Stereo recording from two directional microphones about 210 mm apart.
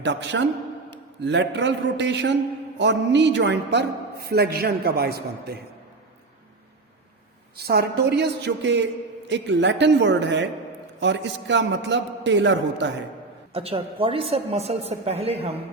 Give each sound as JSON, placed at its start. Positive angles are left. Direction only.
{"t": 0.0, "sound": "a man's voice", "side_deg": -55}
{"t": 7.5, "sound": "a man's voice", "side_deg": -50}
{"t": 13.5, "sound": "a woman's voice", "side_deg": -25}